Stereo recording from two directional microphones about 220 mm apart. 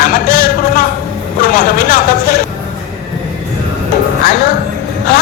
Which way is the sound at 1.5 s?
40° left (ahead or behind).